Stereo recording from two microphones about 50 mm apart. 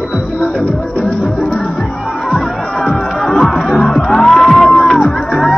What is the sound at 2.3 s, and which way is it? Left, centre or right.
Music, centre.